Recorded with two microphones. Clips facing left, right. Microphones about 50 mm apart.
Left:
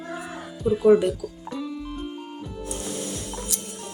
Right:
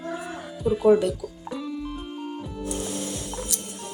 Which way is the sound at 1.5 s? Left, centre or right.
Centre.